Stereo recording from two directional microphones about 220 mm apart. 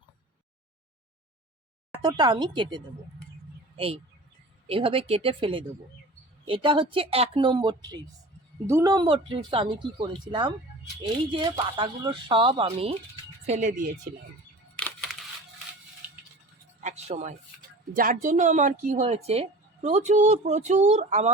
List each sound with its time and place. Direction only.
2.0 s speech: 20° right (ahead or behind)
14.8 s a sound: 5° left (ahead or behind)
16.8 s a woman's voice: 30° right (ahead or behind)